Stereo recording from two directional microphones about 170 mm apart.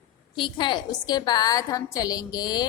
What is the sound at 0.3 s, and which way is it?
A woman's voice, 30° left (ahead or behind).